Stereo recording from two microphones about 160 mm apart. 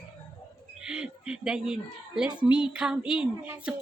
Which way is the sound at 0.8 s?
5° right (ahead or behind).